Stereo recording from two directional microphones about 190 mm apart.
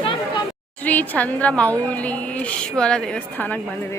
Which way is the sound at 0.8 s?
10° left (ahead or behind).